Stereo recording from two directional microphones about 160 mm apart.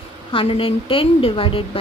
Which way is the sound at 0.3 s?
35° left (ahead or behind).